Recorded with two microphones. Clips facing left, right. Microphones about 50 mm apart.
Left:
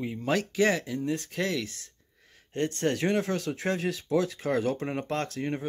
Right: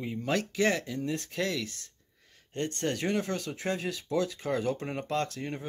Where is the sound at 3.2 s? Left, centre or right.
Centre.